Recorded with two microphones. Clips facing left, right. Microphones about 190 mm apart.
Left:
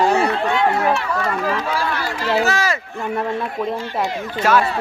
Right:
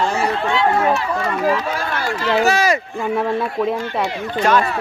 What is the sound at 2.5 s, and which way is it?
Speech, 15° right (ahead or behind).